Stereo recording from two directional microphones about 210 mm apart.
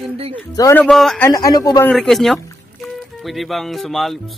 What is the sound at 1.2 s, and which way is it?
Speech, 15° left (ahead or behind).